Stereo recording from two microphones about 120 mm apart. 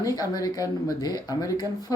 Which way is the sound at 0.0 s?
30° left (ahead or behind).